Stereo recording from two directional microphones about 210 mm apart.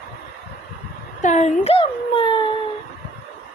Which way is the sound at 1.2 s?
35° left (ahead or behind).